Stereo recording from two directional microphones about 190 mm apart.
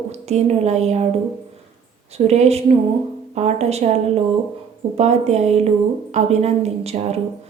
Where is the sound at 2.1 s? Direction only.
35° right (ahead or behind).